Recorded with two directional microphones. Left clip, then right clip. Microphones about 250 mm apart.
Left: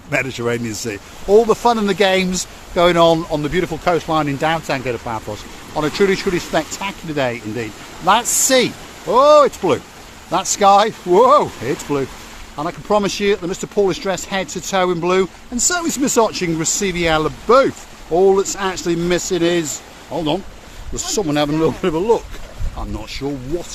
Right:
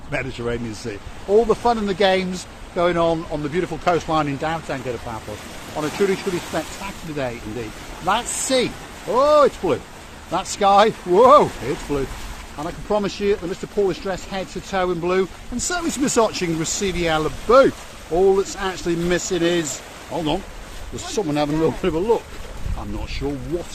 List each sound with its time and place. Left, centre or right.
0.1 s speech: left
12.5 s speech: left
23.2 s speech: left